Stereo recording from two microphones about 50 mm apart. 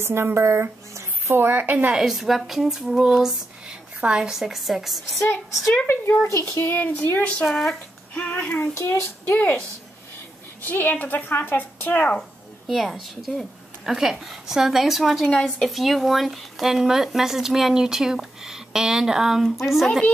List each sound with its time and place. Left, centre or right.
0.0 s speech: right
1.3 s a woman's voice: right
2.0 s speech: centre
3.6 s a woman's voice: centre
6.2 s child singing: left
6.7 s speech: left
7.4 s speech: centre
8.1 s speech: left
8.7 s child singing: left
10.6 s speech: left
12.2 s a woman's voice: centre
15.2 s speech: centre
15.7 s speech: centre
19.4 s speech: centre